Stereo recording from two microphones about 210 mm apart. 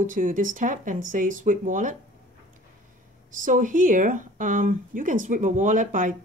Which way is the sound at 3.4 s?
40° right (ahead or behind).